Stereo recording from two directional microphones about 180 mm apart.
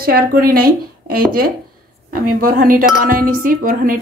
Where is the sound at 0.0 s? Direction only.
55° right (ahead or behind).